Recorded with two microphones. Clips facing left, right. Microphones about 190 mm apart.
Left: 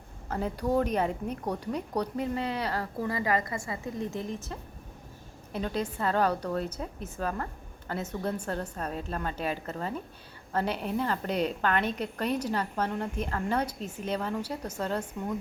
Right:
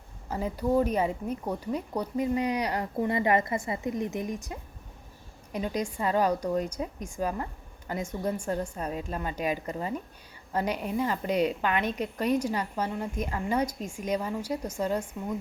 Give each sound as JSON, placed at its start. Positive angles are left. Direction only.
{"t": 0.3, "sound": "a woman's voice", "side_deg": -10}